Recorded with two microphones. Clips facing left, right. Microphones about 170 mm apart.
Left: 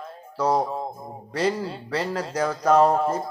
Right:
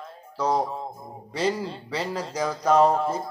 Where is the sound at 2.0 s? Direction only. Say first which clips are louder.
Left 2 dB; 10° right (ahead or behind).